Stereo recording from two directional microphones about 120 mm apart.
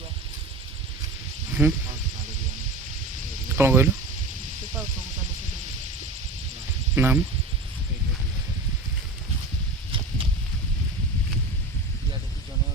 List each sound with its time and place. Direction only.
1.6 s speech: 5° right (ahead or behind)
3.5 s speech: 20° right (ahead or behind)
6.9 s speech: 20° right (ahead or behind)